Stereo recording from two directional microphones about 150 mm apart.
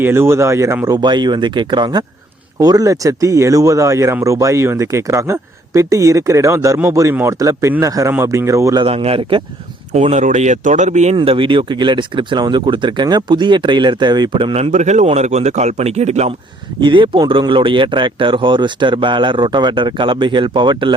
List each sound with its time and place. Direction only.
0.0 s speech: 15° right (ahead or behind)
8.8 s speech: 40° right (ahead or behind)
11.2 s speech: 35° right (ahead or behind)
16.8 s speech: 35° right (ahead or behind)